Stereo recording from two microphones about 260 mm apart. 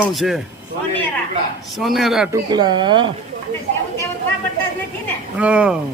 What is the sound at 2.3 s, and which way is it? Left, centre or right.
Speech, centre.